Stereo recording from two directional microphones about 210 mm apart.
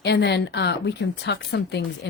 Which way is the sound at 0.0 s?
55° left (ahead or behind).